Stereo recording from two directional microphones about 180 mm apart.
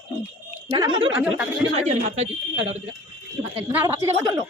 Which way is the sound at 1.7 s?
40° right (ahead or behind).